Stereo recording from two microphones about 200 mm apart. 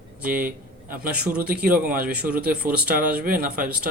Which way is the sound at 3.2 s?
45° right (ahead or behind).